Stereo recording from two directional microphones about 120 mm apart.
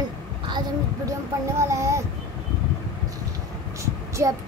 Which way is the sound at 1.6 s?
25° right (ahead or behind).